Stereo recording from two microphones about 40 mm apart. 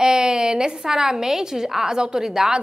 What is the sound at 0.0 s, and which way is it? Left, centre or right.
A woman's voice, centre.